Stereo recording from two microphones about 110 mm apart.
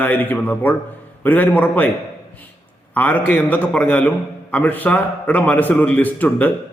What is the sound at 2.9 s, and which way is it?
A man's voice, 15° left (ahead or behind).